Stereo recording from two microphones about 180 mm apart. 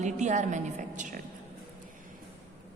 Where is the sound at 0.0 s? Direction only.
40° right (ahead or behind).